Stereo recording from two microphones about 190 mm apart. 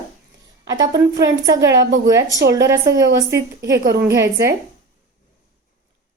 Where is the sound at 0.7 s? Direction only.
20° right (ahead or behind).